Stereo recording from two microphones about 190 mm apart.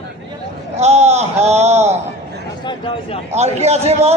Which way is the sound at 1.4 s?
35° right (ahead or behind).